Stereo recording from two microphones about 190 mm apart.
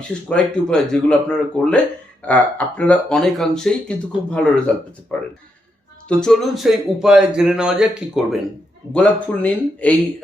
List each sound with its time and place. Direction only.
0.1 s speech: 5° left (ahead or behind)
6.1 s speech: 5° left (ahead or behind)